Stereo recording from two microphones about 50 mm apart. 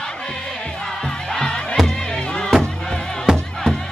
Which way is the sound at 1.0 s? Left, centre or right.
Centre.